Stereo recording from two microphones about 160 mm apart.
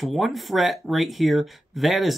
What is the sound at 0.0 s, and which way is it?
Speech, centre (ahead or behind).